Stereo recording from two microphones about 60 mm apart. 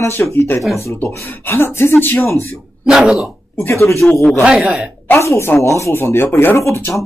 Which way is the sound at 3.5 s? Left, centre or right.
Left.